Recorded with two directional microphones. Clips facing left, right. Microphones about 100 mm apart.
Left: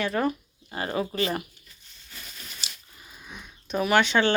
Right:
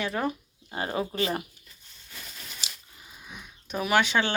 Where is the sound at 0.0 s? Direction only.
15° right (ahead or behind).